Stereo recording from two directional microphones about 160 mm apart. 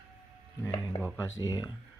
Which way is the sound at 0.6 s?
25° left (ahead or behind).